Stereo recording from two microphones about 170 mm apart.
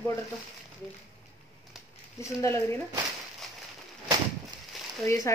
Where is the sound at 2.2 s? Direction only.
15° left (ahead or behind).